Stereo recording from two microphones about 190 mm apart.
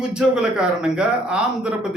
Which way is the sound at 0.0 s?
5° right (ahead or behind).